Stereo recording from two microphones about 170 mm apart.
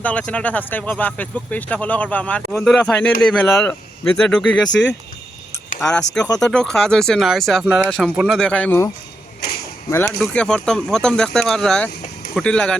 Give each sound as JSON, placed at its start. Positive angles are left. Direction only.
{"t": 0.0, "sound": "speech", "side_deg": 10}
{"t": 4.7, "sound": "speech", "side_deg": 90}
{"t": 5.8, "sound": "speech", "side_deg": 5}
{"t": 9.4, "sound": "speech", "side_deg": 70}
{"t": 10.2, "sound": "speech", "side_deg": 5}